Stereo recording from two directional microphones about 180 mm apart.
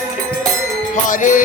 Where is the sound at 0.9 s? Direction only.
45° left (ahead or behind).